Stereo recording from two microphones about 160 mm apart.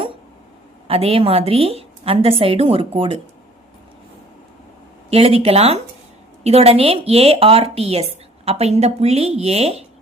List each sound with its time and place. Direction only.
0.9 s a woman's voice: 35° right (ahead or behind)
5.1 s a woman's voice: 35° right (ahead or behind)